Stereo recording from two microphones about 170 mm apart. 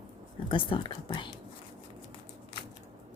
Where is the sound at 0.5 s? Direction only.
30° left (ahead or behind).